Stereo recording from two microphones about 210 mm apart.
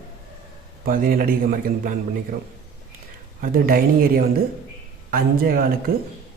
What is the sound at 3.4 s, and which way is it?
Speech, 45° right (ahead or behind).